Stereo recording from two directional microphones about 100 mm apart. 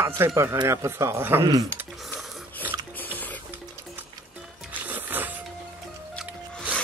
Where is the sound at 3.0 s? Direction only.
15° left (ahead or behind).